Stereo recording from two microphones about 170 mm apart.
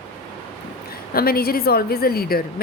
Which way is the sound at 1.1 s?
65° left (ahead or behind).